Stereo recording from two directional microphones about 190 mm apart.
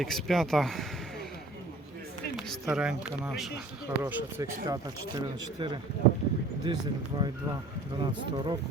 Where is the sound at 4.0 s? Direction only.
15° right (ahead or behind).